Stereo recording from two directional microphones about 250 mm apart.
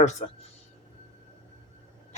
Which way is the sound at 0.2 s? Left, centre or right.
Left.